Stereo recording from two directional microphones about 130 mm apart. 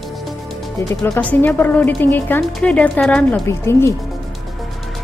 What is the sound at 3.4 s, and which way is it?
Speech, 20° left (ahead or behind).